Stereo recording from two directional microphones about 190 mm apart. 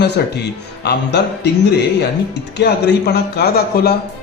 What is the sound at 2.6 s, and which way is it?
A man's voice, 60° left (ahead or behind).